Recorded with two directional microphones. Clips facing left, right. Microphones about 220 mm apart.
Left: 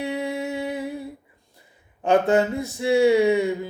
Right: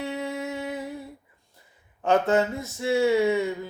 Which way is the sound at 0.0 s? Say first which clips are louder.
Left 4 dB; 15° left (ahead or behind).